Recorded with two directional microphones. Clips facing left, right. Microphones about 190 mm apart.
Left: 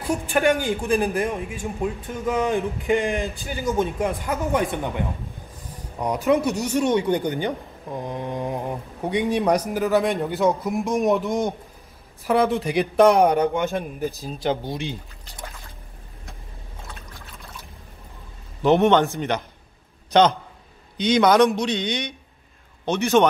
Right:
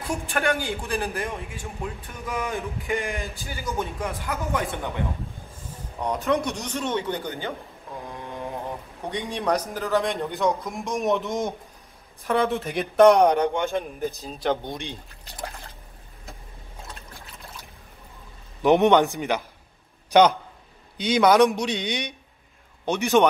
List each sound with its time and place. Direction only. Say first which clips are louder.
0.0 s speech: left 5 dB; 15° left (ahead or behind)
5.9 s a man's voice: left 4 dB; 15° left (ahead or behind)
18.6 s a man's voice: even; 15° right (ahead or behind)